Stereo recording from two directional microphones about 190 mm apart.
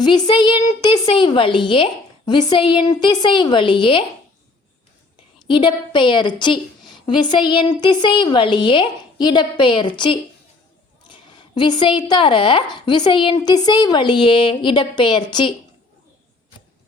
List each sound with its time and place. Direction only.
0.0 s a woman's voice: 25° left (ahead or behind)
5.5 s a woman's voice: 25° left (ahead or behind)